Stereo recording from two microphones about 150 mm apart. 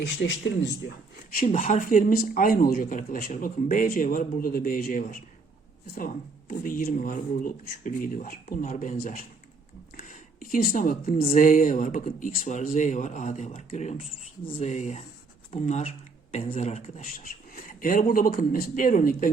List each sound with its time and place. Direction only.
1.5 s speech: 50° left (ahead or behind)
8.6 s speech: 50° left (ahead or behind)
10.0 s a sound: 65° left (ahead or behind)
11.2 s speech: 50° left (ahead or behind)
17.5 s speech: 65° left (ahead or behind)